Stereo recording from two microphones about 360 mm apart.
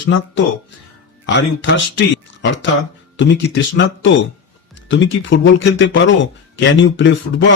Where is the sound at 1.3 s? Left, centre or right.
Left.